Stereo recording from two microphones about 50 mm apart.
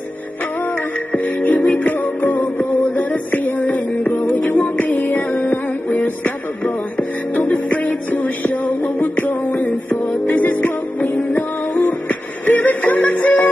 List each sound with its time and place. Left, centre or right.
0.6 s music: left
4.3 s music: left
4.6 s music: left